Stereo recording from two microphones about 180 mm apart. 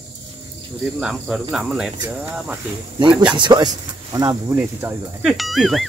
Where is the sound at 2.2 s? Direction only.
10° right (ahead or behind).